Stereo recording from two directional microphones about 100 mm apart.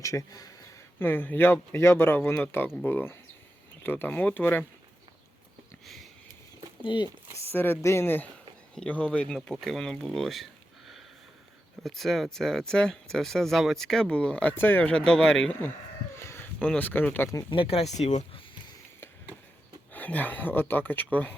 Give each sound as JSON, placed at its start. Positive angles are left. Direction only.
{"t": 0.0, "sound": "speech", "side_deg": 35}
{"t": 0.9, "sound": "speech", "side_deg": 20}
{"t": 5.8, "sound": "sniff", "side_deg": 0}
{"t": 6.8, "sound": "speech", "side_deg": 55}
{"t": 7.5, "sound": "speech", "side_deg": 20}
{"t": 16.1, "sound": "a sound", "side_deg": 25}
{"t": 16.6, "sound": "speech", "side_deg": 15}
{"t": 17.5, "sound": "speech", "side_deg": 70}
{"t": 19.9, "sound": "speech", "side_deg": 15}